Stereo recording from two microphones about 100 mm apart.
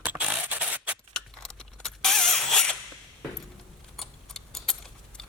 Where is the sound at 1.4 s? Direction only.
5° left (ahead or behind).